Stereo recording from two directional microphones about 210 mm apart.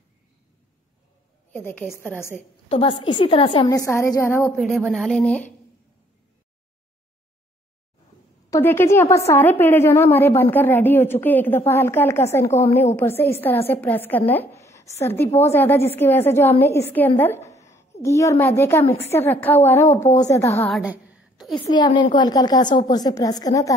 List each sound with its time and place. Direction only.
1.5 s a woman's voice: 10° left (ahead or behind)
2.7 s a woman's voice: 25° left (ahead or behind)
4.6 s speech: centre (ahead or behind)
8.5 s a woman's voice: 15° left (ahead or behind)
17.5 s a sound: 15° left (ahead or behind)
18.0 s a woman's voice: 15° left (ahead or behind)
20.8 s a sound: 5° right (ahead or behind)
21.5 s a woman's voice: 20° left (ahead or behind)